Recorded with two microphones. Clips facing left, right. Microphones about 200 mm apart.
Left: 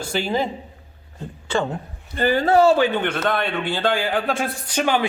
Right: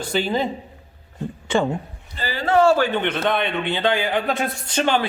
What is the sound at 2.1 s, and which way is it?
Speech, 50° left (ahead or behind).